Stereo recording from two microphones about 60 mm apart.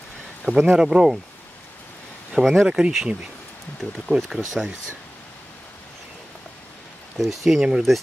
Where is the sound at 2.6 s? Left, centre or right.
Centre.